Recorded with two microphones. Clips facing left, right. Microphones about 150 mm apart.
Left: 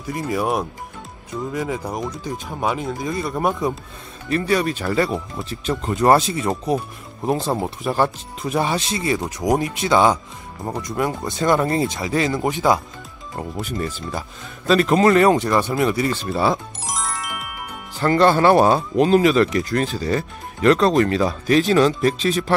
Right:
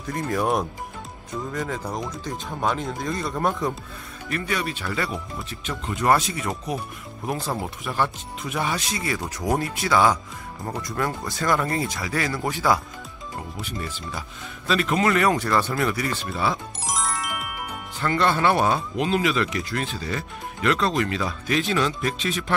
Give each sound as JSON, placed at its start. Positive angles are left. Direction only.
{"t": 0.0, "sound": "speech", "side_deg": 5}
{"t": 3.3, "sound": "speech", "side_deg": 15}
{"t": 4.3, "sound": "speech", "side_deg": 35}
{"t": 13.4, "sound": "speech", "side_deg": 45}
{"t": 16.8, "sound": "music", "side_deg": 0}
{"t": 17.9, "sound": "speech", "side_deg": 35}